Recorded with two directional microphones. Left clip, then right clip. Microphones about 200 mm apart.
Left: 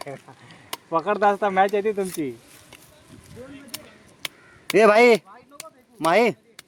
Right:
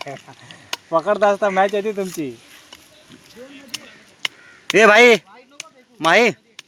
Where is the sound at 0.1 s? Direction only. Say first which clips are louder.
Right 4 dB; 45° right (ahead or behind).